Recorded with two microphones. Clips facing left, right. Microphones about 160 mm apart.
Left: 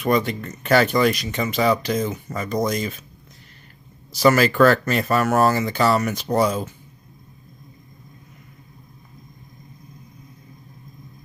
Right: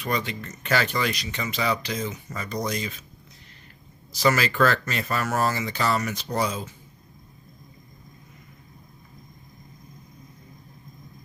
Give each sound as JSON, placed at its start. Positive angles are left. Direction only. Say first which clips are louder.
{"t": 0.0, "sound": "speech", "louder": "left 8 dB", "side_deg": 50}
{"t": 4.2, "sound": "speech", "louder": "left 6 dB", "side_deg": 50}